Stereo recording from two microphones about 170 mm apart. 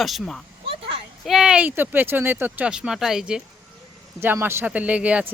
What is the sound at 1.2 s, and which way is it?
Speech, centre (ahead or behind).